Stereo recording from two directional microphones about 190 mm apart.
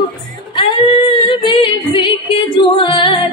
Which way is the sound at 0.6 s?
25° left (ahead or behind).